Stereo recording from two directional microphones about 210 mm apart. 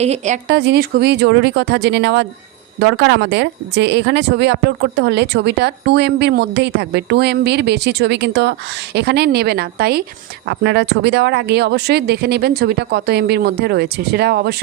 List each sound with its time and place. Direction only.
0.0 s speech: 30° right (ahead or behind)
0.4 s a woman's voice: 55° right (ahead or behind)